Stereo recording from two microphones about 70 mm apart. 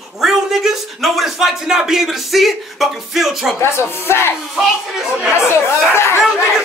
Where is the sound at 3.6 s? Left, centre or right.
Left.